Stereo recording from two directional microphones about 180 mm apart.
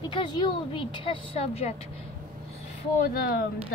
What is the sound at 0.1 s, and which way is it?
Speech, 25° left (ahead or behind).